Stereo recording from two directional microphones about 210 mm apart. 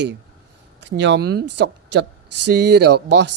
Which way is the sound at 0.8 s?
55° right (ahead or behind).